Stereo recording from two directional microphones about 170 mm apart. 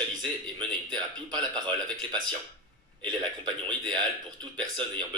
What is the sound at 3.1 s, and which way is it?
A man's voice, 25° right (ahead or behind).